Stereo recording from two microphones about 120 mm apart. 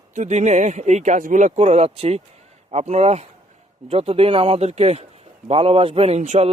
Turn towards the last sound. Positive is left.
turn(degrees=-70)  # may be behind; listen again after turning